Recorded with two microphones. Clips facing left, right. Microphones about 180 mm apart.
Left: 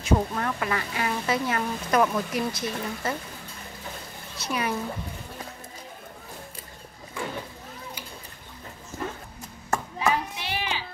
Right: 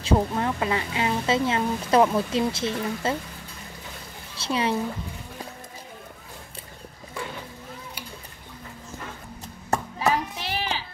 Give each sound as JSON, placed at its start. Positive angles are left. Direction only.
{"t": 0.0, "sound": "a woman's voice", "side_deg": -25}
{"t": 4.4, "sound": "a woman's voice", "side_deg": -25}
{"t": 9.7, "sound": "a sound", "side_deg": -35}